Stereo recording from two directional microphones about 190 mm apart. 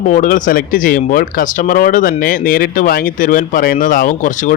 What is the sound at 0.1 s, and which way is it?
Speech, 45° left (ahead or behind).